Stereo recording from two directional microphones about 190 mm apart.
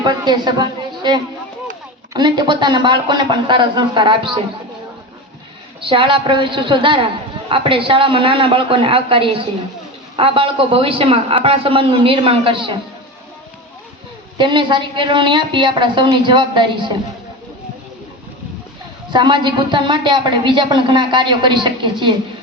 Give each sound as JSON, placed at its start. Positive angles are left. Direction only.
{"t": 0.0, "sound": "a woman's voice", "side_deg": -20}
{"t": 5.8, "sound": "a woman's voice", "side_deg": -25}
{"t": 14.3, "sound": "a woman's voice", "side_deg": -25}
{"t": 19.1, "sound": "a woman's voice", "side_deg": -25}